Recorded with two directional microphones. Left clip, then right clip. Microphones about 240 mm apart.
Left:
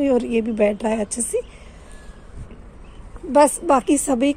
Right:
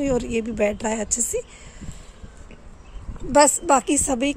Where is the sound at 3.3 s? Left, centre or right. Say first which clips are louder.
Left 1 dB; centre.